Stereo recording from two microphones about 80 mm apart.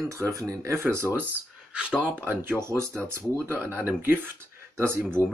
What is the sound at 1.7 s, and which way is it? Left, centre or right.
Speech, centre.